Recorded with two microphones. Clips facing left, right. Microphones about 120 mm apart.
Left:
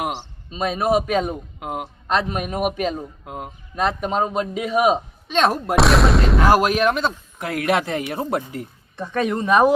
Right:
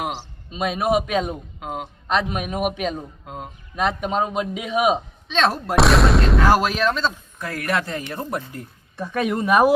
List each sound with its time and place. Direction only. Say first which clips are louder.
0.2 s a man's voice: left 1 dB; centre (ahead or behind)
5.3 s speech: left 2 dB; 10° left (ahead or behind)
5.7 s a man's voice: right 1 dB; centre (ahead or behind)
6.4 s a man's voice: left 4 dB; 10° left (ahead or behind)
9.0 s speech: left 1 dB; 5° right (ahead or behind)